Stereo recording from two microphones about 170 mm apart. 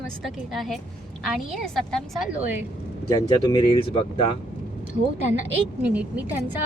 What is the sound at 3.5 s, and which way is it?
Speech, 30° left (ahead or behind).